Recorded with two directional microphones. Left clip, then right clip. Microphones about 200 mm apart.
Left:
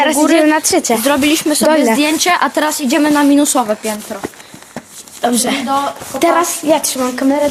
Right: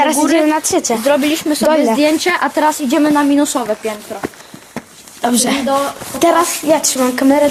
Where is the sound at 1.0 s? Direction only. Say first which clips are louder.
Left 1 dB; 65° left (ahead or behind).